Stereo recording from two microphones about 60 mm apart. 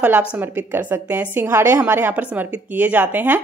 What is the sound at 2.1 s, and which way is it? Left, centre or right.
Speech, right.